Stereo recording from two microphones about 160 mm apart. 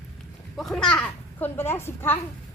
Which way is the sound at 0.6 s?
5° left (ahead or behind).